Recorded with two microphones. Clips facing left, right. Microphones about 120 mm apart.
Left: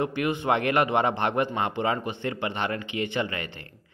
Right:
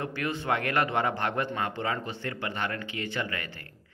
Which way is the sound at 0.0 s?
20° left (ahead or behind).